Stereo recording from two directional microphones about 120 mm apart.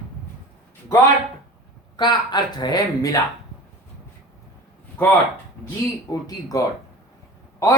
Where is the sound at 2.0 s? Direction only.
35° left (ahead or behind).